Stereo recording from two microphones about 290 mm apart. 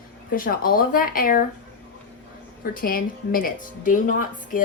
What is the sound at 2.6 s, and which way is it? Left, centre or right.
A woman's voice, left.